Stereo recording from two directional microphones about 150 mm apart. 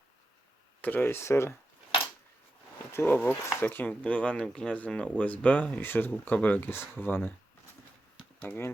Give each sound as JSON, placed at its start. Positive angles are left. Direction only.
{"t": 0.8, "sound": "speech", "side_deg": 10}
{"t": 2.9, "sound": "speech", "side_deg": 15}
{"t": 8.4, "sound": "speech", "side_deg": 15}